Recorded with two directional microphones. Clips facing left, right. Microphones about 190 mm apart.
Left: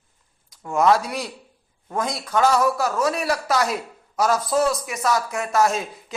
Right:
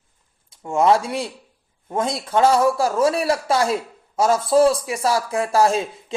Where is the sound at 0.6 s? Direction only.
25° right (ahead or behind).